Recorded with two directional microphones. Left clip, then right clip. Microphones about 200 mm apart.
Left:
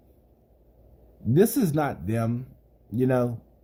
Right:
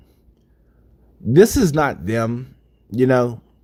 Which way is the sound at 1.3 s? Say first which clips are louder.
Right 9 dB; 35° right (ahead or behind).